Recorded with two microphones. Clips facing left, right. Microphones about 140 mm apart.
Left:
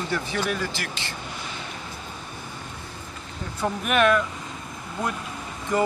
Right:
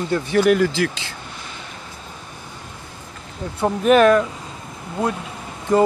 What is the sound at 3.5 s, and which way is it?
Speech, 30° right (ahead or behind).